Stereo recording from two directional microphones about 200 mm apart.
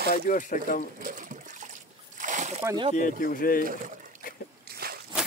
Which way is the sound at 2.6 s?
25° right (ahead or behind).